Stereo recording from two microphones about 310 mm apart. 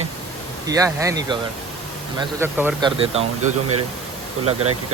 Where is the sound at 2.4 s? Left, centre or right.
Centre.